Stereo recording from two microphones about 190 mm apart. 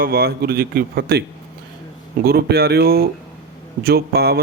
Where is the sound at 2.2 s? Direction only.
55° right (ahead or behind).